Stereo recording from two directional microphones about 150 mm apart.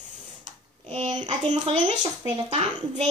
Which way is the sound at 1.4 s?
50° right (ahead or behind).